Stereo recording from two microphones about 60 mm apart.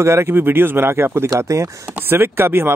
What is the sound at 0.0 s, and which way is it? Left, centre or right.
Speech, right.